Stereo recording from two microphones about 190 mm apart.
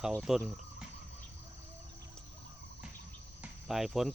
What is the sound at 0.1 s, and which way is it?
Speech, 5° right (ahead or behind).